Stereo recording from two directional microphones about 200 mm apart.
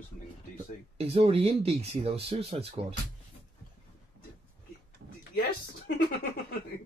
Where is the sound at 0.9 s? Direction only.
30° right (ahead or behind).